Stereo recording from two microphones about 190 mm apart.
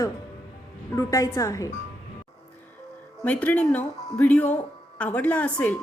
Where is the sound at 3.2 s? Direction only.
5° left (ahead or behind).